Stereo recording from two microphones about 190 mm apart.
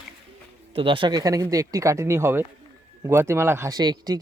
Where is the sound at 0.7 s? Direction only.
25° right (ahead or behind).